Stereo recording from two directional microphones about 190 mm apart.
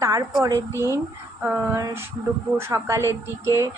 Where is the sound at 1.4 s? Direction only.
5° right (ahead or behind).